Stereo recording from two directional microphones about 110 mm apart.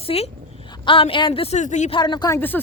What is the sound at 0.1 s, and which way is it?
A woman's voice, 55° left (ahead or behind).